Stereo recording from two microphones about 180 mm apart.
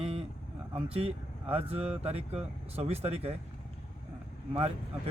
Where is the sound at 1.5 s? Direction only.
35° right (ahead or behind).